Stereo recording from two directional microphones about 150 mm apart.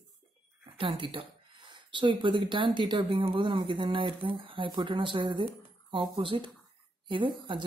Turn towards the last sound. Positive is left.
turn(degrees=-35)  # may be behind; listen again after turning